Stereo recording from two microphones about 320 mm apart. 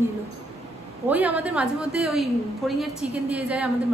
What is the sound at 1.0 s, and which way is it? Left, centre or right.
A woman's voice, centre.